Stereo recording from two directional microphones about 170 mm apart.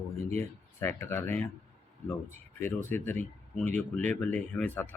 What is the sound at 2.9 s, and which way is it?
Speech, 10° left (ahead or behind).